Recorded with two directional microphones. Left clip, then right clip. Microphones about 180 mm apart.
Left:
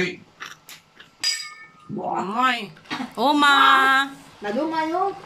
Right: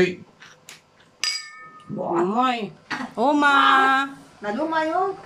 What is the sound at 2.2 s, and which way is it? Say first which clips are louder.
Female singing: even; 20° right (ahead or behind).